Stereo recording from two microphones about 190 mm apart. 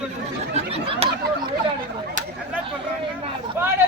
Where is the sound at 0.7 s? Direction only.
30° right (ahead or behind).